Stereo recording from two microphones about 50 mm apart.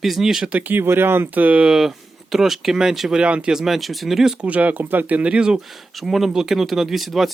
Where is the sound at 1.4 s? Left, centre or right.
Right.